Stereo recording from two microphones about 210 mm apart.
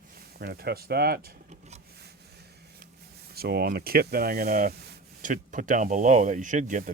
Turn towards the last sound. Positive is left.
turn(degrees=-35)  # may be behind; listen again after turning